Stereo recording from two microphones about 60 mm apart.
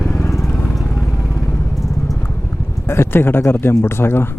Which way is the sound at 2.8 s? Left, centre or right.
Left.